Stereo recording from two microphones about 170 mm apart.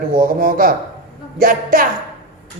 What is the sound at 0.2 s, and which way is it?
A woman's voice, 55° right (ahead or behind).